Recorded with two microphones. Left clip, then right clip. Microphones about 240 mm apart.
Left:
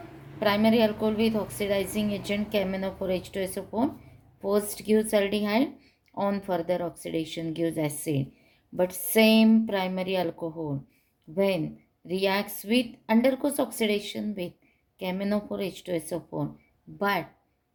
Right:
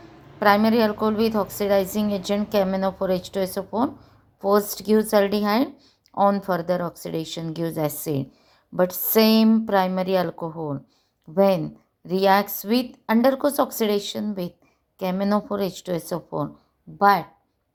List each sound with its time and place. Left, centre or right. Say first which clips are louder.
0.3 s a woman's voice: right 5 dB; right